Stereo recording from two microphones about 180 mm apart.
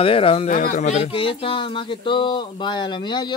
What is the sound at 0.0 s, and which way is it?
Speech, 30° left (ahead or behind).